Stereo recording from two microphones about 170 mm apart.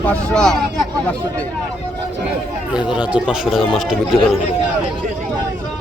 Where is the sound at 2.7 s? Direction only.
5° right (ahead or behind).